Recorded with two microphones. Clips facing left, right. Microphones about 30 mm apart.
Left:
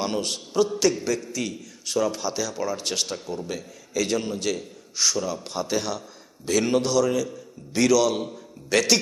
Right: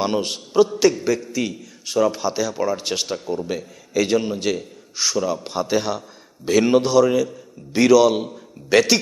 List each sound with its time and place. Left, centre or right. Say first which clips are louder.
0.0 s a man's voice: right 5 dB; centre